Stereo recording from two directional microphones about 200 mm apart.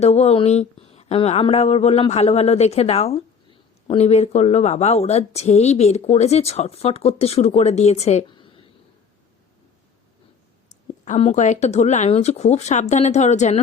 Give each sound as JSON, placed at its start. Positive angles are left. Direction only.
{"t": 0.0, "sound": "speech", "side_deg": 30}
{"t": 10.7, "sound": "speech", "side_deg": 35}